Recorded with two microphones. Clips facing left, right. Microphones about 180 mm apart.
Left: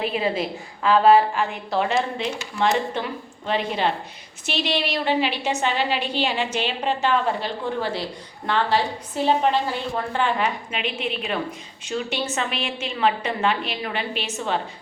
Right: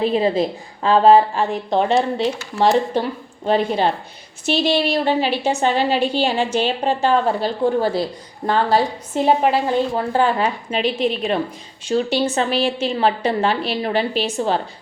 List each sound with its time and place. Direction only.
0.0 s a woman's voice: 35° right (ahead or behind)